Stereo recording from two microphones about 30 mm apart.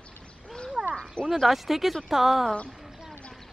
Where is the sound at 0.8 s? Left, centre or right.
Right.